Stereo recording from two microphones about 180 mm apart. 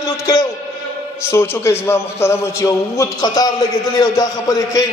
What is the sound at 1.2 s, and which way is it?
A man's voice, 15° left (ahead or behind).